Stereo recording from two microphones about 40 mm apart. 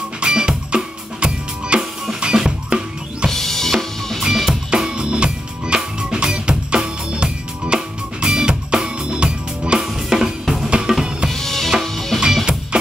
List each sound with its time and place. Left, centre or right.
0.2 s drum kit: right
2.1 s music: centre
3.3 s drum: centre
4.2 s drum kit: centre
4.6 s music: right
6.5 s music: centre
7.1 s music: right
9.8 s music: centre
10.4 s drum kit: centre
10.7 s music: centre
11.2 s drum: centre
11.8 s music: centre